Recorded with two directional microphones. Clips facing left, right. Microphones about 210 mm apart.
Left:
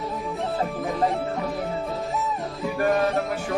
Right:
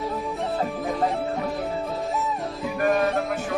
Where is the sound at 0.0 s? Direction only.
Centre (ahead or behind).